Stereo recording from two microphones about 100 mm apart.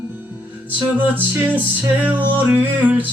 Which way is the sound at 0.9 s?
20° right (ahead or behind).